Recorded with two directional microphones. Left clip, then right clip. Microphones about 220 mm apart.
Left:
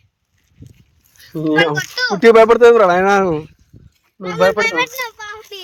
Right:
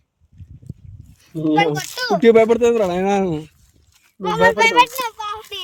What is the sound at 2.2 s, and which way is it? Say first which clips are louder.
Speech: left 5 dB; centre (ahead or behind).